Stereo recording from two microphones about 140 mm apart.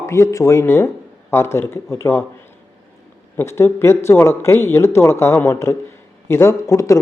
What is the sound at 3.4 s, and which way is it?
Speech, 20° left (ahead or behind).